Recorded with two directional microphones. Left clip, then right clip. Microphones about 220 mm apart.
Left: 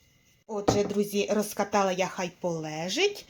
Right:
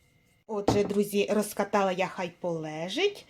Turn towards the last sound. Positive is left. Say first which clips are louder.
# left 1 dB
turn(degrees=0)  # may be behind; listen again after turning